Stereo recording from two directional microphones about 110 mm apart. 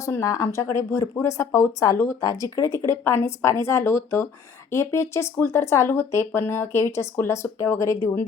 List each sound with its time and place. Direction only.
0.0 s speech: 30° left (ahead or behind)